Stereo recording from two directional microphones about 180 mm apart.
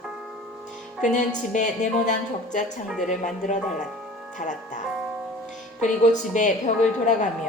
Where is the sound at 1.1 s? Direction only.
45° left (ahead or behind).